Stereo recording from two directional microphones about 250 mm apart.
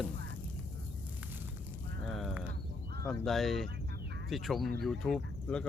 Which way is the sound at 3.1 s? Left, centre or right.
Centre.